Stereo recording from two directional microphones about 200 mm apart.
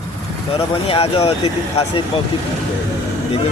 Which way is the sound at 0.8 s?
30° left (ahead or behind).